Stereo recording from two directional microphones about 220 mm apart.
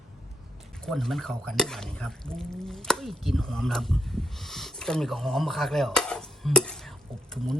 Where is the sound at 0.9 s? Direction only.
Centre (ahead or behind).